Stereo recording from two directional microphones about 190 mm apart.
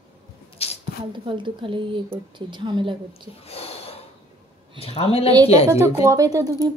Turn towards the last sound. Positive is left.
turn(degrees=-20)  # may be behind; listen again after turning